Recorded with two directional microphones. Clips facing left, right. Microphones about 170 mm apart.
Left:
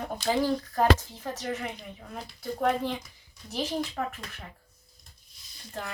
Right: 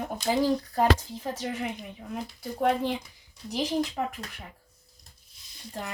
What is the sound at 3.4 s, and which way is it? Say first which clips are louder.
Speech: right 3 dB; 15° right (ahead or behind).